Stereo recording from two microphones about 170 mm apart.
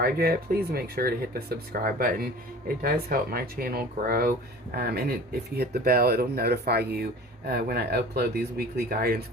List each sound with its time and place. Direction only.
0.0 s speech: 65° right (ahead or behind)